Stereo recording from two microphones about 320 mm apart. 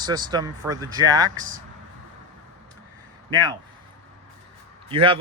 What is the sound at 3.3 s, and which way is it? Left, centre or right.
Speech, centre.